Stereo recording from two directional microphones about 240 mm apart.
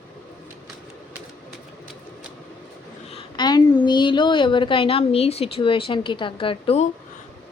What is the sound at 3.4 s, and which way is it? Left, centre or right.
A woman's voice, centre.